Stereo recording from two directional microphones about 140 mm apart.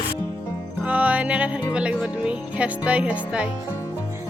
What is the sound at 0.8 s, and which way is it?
Speech, 10° right (ahead or behind).